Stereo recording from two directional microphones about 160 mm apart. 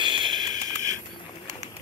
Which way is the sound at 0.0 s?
30° right (ahead or behind).